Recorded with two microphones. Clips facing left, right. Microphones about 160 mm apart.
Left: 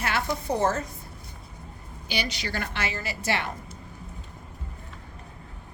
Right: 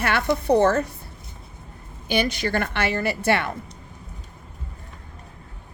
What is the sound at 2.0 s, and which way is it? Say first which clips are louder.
A woman's voice: right 8 dB; 50° right (ahead or behind).